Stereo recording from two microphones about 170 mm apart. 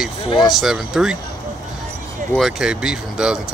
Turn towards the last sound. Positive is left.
turn(degrees=-5)  # may be behind; listen again after turning